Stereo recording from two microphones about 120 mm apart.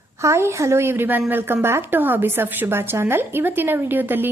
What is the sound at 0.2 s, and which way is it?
A woman's voice, 25° right (ahead or behind).